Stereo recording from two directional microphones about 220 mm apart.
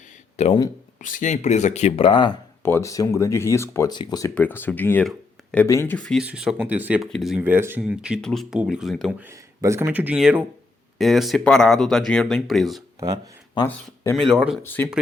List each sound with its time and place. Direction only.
0.3 s speech: 30° left (ahead or behind)
2.6 s speech: 10° left (ahead or behind)
9.2 s speech: 15° right (ahead or behind)
13.5 s speech: 10° left (ahead or behind)
14.2 s speech: 5° right (ahead or behind)
14.6 s speech: 10° left (ahead or behind)